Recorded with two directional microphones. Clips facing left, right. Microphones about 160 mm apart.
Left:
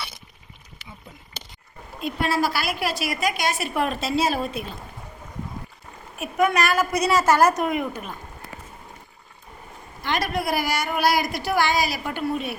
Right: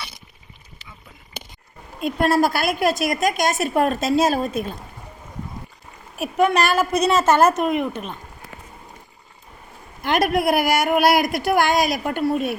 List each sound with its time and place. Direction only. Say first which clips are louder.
2.0 s a woman's voice: right 5 dB; 50° right (ahead or behind)
6.3 s a woman's voice: right 3 dB; 30° right (ahead or behind)
10.0 s a woman's voice: right 6 dB; 55° right (ahead or behind)